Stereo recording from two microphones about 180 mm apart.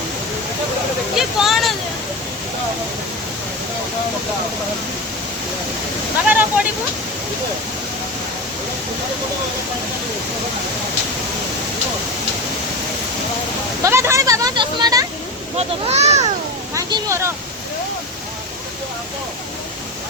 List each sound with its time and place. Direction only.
1.1 s a sound: centre (ahead or behind)
6.2 s speech: 10° right (ahead or behind)
13.8 s speech: 15° right (ahead or behind)
15.5 s speech: 35° right (ahead or behind)
16.7 s speech: 15° right (ahead or behind)